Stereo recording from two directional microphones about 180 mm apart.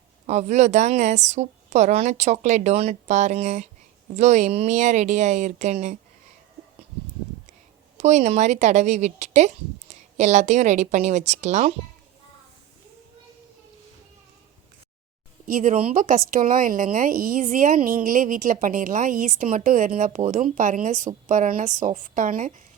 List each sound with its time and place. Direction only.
0.3 s speech: 40° right (ahead or behind)
7.9 s speech: 40° right (ahead or behind)
15.4 s speech: 45° right (ahead or behind)